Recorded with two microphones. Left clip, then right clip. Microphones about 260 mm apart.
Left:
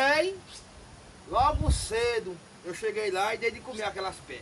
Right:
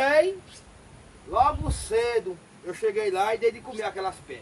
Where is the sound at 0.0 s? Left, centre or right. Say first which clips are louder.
Right 4 dB; centre.